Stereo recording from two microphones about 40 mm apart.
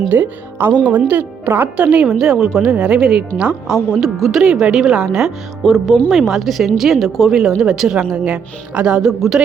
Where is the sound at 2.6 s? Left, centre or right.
Right.